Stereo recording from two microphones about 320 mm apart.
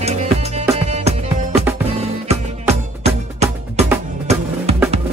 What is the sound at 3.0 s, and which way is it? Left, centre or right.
Music, centre.